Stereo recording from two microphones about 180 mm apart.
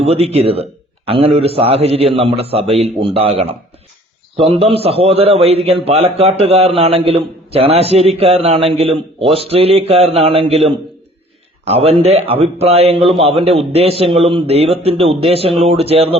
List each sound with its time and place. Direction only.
0.0 s a man's voice: 35° right (ahead or behind)